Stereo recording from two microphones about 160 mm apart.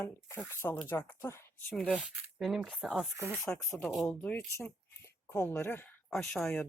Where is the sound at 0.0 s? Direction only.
15° left (ahead or behind).